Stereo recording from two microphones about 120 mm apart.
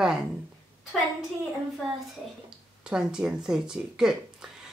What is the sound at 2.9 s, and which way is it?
A woman's voice, 10° right (ahead or behind).